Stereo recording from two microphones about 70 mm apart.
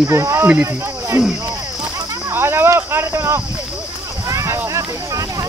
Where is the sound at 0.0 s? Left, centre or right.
Right.